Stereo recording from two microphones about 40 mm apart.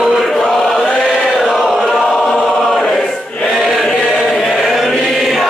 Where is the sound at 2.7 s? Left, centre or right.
Centre.